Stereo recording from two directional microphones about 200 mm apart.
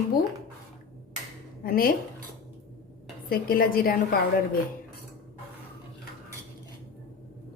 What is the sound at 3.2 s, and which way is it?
Speech, 45° left (ahead or behind).